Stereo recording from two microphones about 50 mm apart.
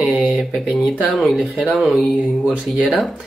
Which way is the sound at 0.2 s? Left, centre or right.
Centre.